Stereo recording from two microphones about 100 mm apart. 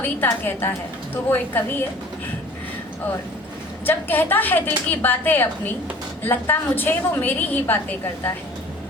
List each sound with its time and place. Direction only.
0.0 s a woman's voice: 20° left (ahead or behind)
3.8 s a woman's voice: 20° left (ahead or behind)